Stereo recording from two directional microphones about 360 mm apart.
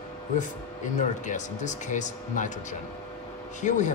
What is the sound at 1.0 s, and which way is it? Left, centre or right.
Speech, centre.